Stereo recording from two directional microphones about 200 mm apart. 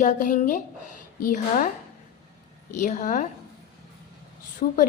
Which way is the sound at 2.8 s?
40° left (ahead or behind).